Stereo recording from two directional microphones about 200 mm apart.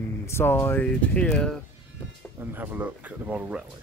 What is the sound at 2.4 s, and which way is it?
Speech, 10° right (ahead or behind).